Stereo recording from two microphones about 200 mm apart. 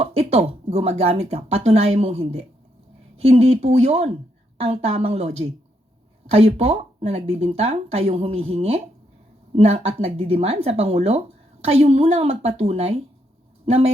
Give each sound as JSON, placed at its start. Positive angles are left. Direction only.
{"t": 0.0, "sound": "speech", "side_deg": -30}
{"t": 6.3, "sound": "speech", "side_deg": -30}